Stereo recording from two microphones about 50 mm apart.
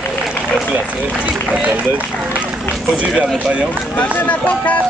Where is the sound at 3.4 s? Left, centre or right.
Right.